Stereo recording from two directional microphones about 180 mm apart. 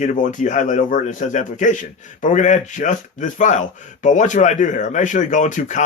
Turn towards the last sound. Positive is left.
turn(degrees=45)  # may be behind; listen again after turning